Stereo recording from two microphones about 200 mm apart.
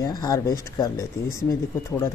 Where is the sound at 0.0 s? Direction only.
20° left (ahead or behind).